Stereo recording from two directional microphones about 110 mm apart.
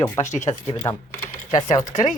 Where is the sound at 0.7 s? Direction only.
40° left (ahead or behind).